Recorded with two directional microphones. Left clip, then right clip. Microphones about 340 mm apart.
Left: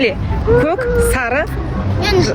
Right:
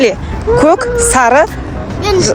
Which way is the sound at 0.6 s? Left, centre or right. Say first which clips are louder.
Right 5 dB; centre.